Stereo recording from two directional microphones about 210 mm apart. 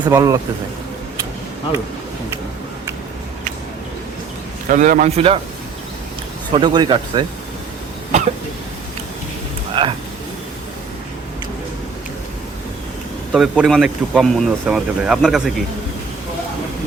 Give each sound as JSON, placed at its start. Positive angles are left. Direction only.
{"t": 0.0, "sound": "speech", "side_deg": -15}
{"t": 4.7, "sound": "a man's voice", "side_deg": -40}
{"t": 6.5, "sound": "speech", "side_deg": -20}
{"t": 9.8, "sound": "speech", "side_deg": -20}
{"t": 13.3, "sound": "speech", "side_deg": 0}